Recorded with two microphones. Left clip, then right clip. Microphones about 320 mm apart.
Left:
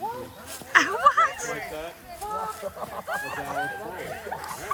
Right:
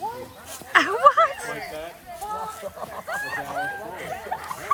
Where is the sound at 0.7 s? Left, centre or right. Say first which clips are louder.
Right 3 dB; centre.